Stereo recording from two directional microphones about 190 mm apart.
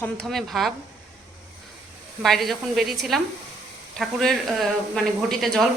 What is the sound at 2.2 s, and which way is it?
Speech, centre (ahead or behind).